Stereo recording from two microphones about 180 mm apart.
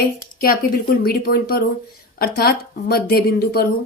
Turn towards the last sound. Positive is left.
turn(degrees=60)  # may be behind; listen again after turning